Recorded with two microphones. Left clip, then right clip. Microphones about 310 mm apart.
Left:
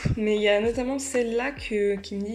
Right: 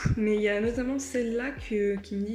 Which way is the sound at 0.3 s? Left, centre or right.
Centre.